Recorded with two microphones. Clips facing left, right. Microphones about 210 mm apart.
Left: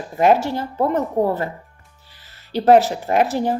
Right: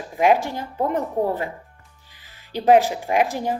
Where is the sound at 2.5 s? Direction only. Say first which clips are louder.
Left 2 dB; 15° right (ahead or behind).